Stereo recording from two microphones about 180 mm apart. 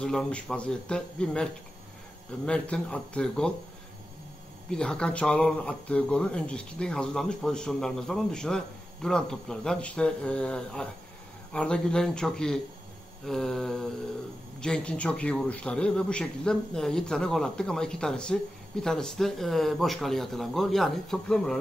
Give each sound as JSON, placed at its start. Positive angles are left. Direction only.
{"t": 0.0, "sound": "a man's voice", "side_deg": 5}
{"t": 4.6, "sound": "a man's voice", "side_deg": 5}